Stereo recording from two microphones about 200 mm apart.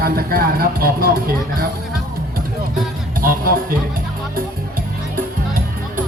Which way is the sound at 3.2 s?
45° right (ahead or behind).